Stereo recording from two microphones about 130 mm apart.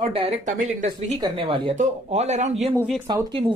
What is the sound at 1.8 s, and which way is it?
Speech, 60° right (ahead or behind).